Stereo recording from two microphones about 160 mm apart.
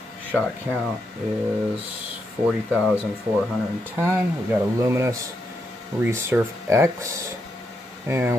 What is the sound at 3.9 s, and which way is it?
Speech, 15° right (ahead or behind).